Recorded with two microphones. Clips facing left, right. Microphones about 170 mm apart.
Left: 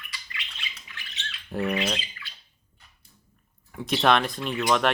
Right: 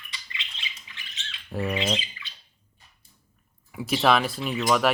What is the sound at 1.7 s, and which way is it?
Bird, 20° right (ahead or behind).